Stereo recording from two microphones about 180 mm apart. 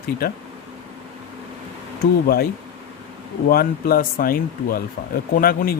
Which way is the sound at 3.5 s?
55° left (ahead or behind).